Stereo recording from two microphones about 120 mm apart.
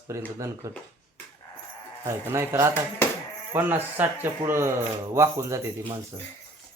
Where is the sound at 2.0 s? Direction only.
20° right (ahead or behind).